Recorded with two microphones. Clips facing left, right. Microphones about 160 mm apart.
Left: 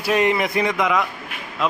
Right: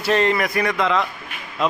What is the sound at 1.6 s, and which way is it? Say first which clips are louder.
Speech: right 1 dB; 5° left (ahead or behind).